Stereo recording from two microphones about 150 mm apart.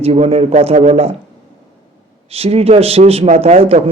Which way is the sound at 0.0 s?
40° right (ahead or behind).